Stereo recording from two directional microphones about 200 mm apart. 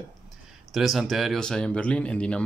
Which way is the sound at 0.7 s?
Centre (ahead or behind).